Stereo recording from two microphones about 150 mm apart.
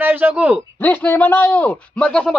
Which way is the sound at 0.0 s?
10° right (ahead or behind).